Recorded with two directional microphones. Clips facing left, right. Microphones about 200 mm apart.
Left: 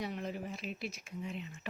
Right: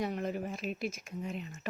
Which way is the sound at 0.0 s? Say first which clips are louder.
Right 5 dB; 50° right (ahead or behind).